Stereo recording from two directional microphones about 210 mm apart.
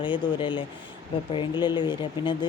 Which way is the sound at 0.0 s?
25° left (ahead or behind).